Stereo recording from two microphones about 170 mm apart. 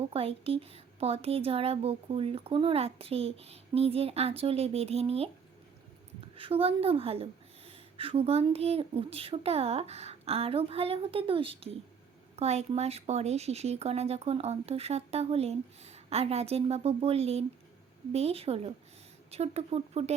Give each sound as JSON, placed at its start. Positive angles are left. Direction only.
{"t": 0.1, "sound": "speech", "side_deg": -35}
{"t": 6.3, "sound": "speech", "side_deg": -35}